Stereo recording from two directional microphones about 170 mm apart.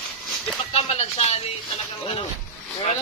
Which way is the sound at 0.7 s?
35° left (ahead or behind).